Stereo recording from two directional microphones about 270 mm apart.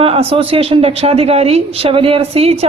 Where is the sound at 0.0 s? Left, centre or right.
Right.